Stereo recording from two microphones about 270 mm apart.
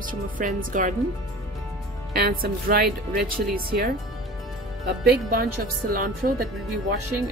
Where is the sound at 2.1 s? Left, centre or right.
Right.